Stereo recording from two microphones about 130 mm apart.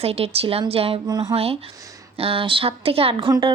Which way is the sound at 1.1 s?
30° right (ahead or behind).